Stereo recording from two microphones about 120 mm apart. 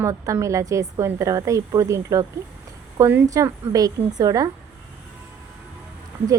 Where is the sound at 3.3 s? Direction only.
30° right (ahead or behind).